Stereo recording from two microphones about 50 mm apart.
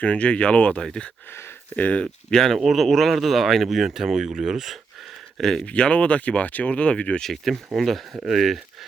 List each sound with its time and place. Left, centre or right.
0.0 s speech: left
1.3 s speech: left
1.7 s speech: left
2.3 s speech: centre
5.4 s speech: centre
5.6 s speech: left
7.2 s speech: centre